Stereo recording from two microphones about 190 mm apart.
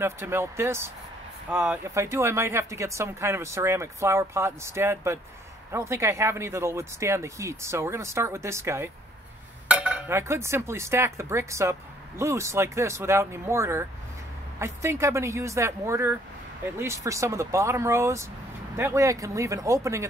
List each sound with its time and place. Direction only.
0.0 s speech: 15° right (ahead or behind)